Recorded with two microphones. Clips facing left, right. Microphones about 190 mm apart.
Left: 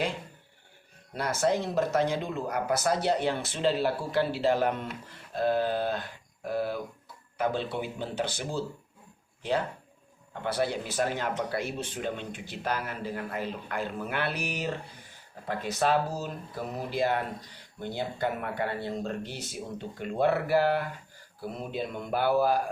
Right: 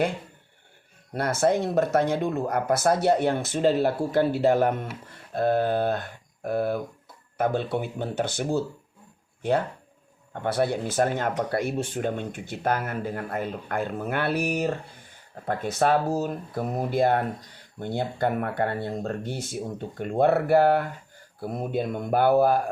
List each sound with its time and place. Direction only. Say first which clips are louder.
1.1 s speech: right 4 dB; 55° right (ahead or behind)